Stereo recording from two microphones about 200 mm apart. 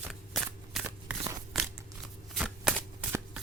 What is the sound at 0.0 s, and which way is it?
Shuffling cards, centre (ahead or behind).